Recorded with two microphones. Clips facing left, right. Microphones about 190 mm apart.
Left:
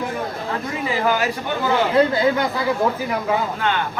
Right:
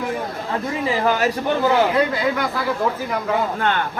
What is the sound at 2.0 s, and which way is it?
Speech, 25° left (ahead or behind).